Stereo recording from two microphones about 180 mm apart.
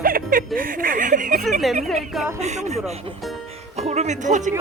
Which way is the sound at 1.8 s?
Centre (ahead or behind).